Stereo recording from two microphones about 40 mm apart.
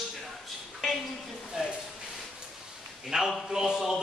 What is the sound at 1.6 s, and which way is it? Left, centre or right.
Speech, centre.